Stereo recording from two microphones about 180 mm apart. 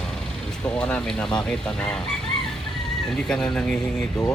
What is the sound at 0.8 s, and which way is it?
Speech, 5° left (ahead or behind).